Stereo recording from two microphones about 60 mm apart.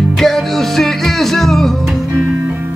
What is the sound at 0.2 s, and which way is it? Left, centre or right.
Music, centre.